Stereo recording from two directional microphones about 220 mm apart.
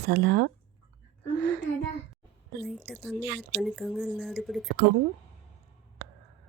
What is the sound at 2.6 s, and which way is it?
Speech, centre (ahead or behind).